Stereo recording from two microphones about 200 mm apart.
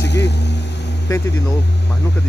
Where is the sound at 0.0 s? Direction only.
60° left (ahead or behind).